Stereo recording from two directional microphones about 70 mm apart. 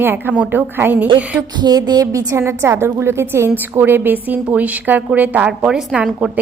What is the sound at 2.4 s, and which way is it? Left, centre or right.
A woman's voice, right.